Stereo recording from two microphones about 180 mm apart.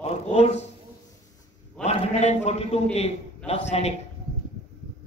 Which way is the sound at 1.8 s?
40° left (ahead or behind).